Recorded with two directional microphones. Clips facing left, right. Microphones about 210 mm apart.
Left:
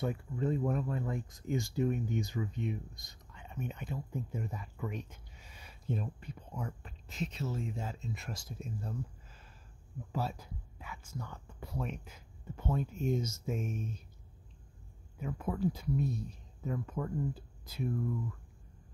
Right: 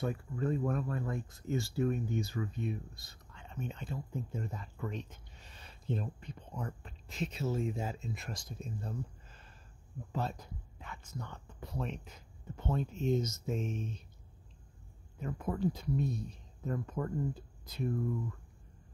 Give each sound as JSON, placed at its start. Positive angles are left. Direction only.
{"t": 0.0, "sound": "speech", "side_deg": 20}
{"t": 15.1, "sound": "speech", "side_deg": 5}